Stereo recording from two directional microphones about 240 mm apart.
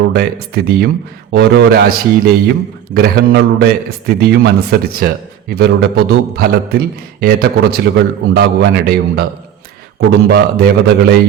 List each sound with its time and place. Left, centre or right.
0.1 s a man's voice: right